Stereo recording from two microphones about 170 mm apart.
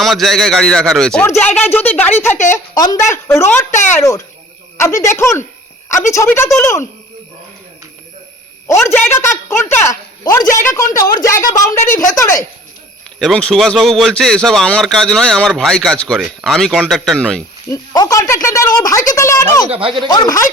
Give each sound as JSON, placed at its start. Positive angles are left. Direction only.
{"t": 0.0, "sound": "a woman's voice", "side_deg": 0}
{"t": 3.7, "sound": "speech", "side_deg": 45}
{"t": 3.9, "sound": "a woman's voice", "side_deg": 20}
{"t": 8.6, "sound": "a woman's voice", "side_deg": 15}
{"t": 13.1, "sound": "speech", "side_deg": 5}
{"t": 17.7, "sound": "a woman's voice", "side_deg": 20}
{"t": 19.7, "sound": "speech", "side_deg": -30}
{"t": 20.1, "sound": "a woman's voice", "side_deg": 20}